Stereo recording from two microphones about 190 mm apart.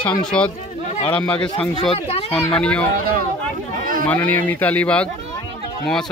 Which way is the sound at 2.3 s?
5° left (ahead or behind).